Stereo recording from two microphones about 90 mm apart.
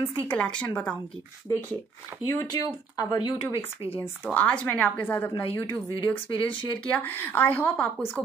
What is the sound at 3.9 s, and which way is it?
A woman's voice, 20° left (ahead or behind).